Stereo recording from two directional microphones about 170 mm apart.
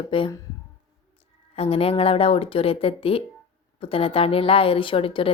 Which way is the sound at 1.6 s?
35° left (ahead or behind).